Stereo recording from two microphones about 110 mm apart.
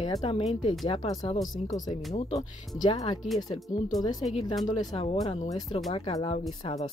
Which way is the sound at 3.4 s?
35° left (ahead or behind).